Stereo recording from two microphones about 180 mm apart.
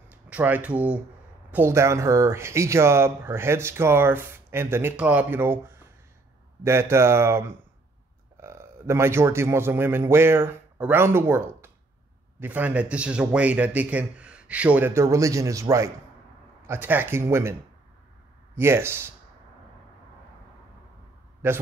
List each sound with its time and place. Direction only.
0.1 s a man's voice: 10° right (ahead or behind)
18.6 s speech: 15° right (ahead or behind)